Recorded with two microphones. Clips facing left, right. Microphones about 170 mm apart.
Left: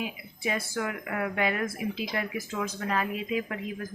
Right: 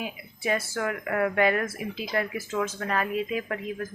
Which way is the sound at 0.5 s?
15° left (ahead or behind).